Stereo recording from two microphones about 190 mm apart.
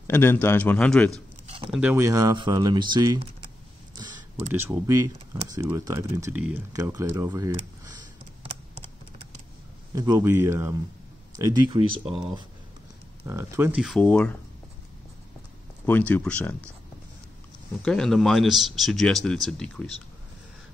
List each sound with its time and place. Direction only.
0.0 s a man's voice: 10° left (ahead or behind)
1.7 s speech: 5° right (ahead or behind)
3.9 s a sound: 20° right (ahead or behind)
4.5 s speech: 10° right (ahead or behind)
9.9 s speech: 20° right (ahead or behind)
13.2 s speech: 15° right (ahead or behind); by 14.3 s 5° left (ahead or behind)
15.8 s a man's voice: 10° left (ahead or behind)
17.8 s speech: centre (ahead or behind)